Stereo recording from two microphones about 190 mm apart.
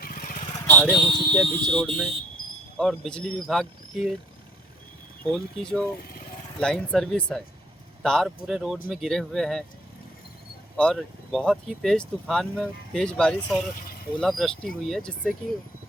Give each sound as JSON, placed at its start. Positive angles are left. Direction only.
{"t": 0.0, "sound": "vehicle", "side_deg": 50}
{"t": 0.5, "sound": "vehicle", "side_deg": 10}
{"t": 1.1, "sound": "speech", "side_deg": -25}
{"t": 1.4, "sound": "speech", "side_deg": 5}
{"t": 2.4, "sound": "cricket", "side_deg": 50}
{"t": 2.7, "sound": "speech", "side_deg": 0}
{"t": 5.3, "sound": "speech", "side_deg": 5}
{"t": 10.8, "sound": "speech", "side_deg": 5}